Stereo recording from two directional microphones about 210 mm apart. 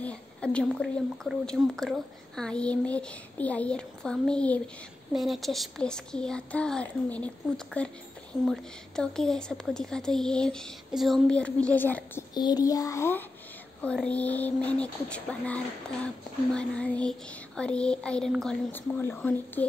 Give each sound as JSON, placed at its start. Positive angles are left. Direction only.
{"t": 0.0, "sound": "a woman's voice", "side_deg": 5}
{"t": 12.4, "sound": "child singing", "side_deg": 20}
{"t": 13.8, "sound": "a woman's voice", "side_deg": 5}